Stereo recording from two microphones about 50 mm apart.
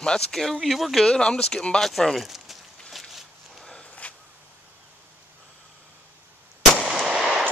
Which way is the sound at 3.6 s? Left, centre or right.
Centre.